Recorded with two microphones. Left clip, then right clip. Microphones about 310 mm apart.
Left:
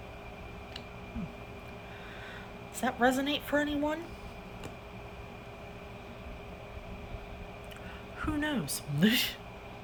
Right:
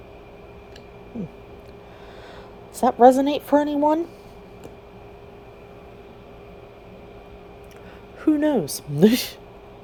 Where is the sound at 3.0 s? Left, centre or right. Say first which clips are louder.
Right 14 dB; centre.